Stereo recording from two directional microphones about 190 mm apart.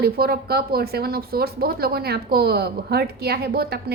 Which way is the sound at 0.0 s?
55° right (ahead or behind).